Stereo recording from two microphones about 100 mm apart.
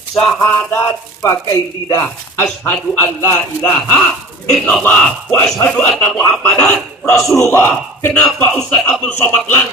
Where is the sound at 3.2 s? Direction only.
30° left (ahead or behind).